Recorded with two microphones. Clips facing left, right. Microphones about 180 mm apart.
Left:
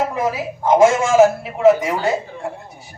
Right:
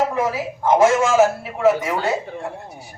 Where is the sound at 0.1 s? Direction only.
15° left (ahead or behind).